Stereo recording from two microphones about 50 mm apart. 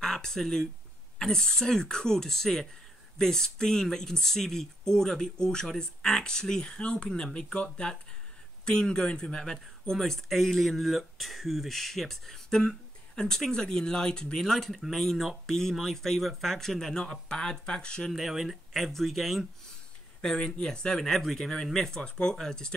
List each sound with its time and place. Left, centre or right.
0.0 s a sound: centre
1.2 s speech: centre
18.1 s speech: centre
20.2 s speech: centre
21.1 s speech: centre